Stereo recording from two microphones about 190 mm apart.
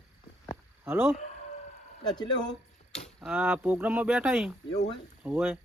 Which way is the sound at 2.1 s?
20° left (ahead or behind).